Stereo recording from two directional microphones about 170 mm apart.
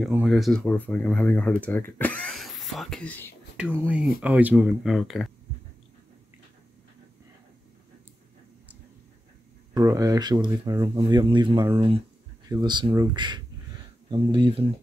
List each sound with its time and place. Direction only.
0.0 s speech: 5° right (ahead or behind)
3.5 s speech: 10° right (ahead or behind)
9.8 s speech: 20° right (ahead or behind)